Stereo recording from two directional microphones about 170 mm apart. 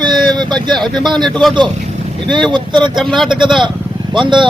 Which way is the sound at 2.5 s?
25° right (ahead or behind).